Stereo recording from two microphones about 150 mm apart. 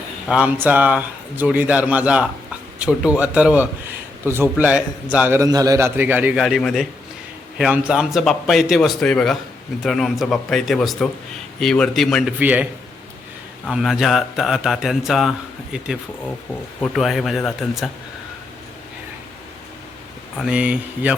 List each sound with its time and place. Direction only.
0.3 s speech: 10° right (ahead or behind)
5.4 s speech: 25° right (ahead or behind); by 12.3 s centre (ahead or behind)
12.4 s speech: 10° right (ahead or behind)
13.7 s speech: 5° right (ahead or behind)
20.3 s speech: 5° right (ahead or behind)